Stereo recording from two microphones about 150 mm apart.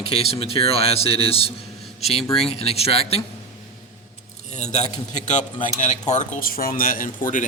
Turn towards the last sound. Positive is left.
turn(degrees=60)  # may be behind; listen again after turning